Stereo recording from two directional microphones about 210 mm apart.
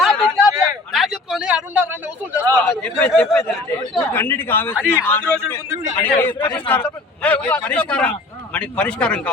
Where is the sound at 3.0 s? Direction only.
5° left (ahead or behind).